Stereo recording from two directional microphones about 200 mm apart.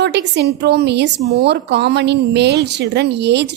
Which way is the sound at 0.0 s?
60° right (ahead or behind).